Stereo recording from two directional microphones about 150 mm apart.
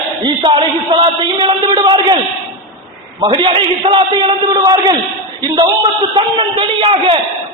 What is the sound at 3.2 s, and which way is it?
Speech, 30° right (ahead or behind).